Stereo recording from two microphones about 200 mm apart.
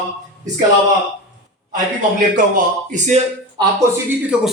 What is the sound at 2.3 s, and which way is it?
Speech, 40° right (ahead or behind).